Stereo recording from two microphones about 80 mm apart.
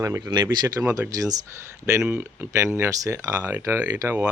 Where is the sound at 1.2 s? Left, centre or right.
Right.